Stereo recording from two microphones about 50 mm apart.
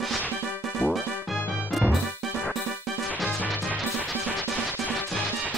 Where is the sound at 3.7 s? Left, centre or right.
Right.